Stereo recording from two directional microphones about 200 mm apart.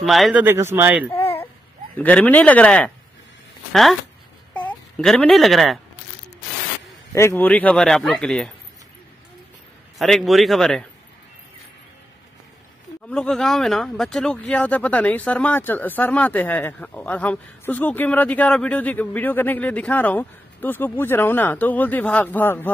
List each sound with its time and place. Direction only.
0.0 s speech: centre (ahead or behind)
1.1 s baby cry: 30° left (ahead or behind)
2.0 s speech: 5° left (ahead or behind)
4.6 s speech: 5° left (ahead or behind)
7.1 s a man's voice: 10° left (ahead or behind)
9.9 s a man's voice: centre (ahead or behind)
13.1 s speech: 5° left (ahead or behind)